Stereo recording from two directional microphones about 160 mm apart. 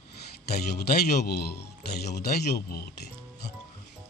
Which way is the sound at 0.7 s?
75° left (ahead or behind).